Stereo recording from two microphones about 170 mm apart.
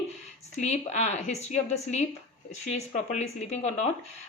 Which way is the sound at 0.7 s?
40° left (ahead or behind).